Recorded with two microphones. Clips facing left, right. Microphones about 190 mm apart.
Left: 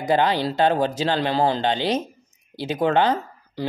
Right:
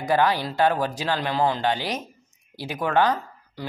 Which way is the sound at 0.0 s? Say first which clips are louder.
Left 2 dB; 20° left (ahead or behind).